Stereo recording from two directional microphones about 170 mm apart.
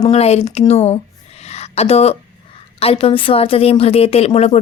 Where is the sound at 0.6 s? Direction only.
40° left (ahead or behind).